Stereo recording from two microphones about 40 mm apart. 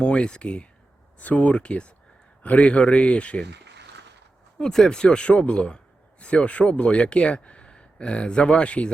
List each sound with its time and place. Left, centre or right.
0.0 s a man's voice: left
1.2 s a man's voice: left
4.6 s a man's voice: centre